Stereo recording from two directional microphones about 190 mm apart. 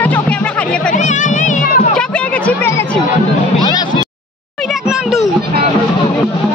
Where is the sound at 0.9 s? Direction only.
40° left (ahead or behind).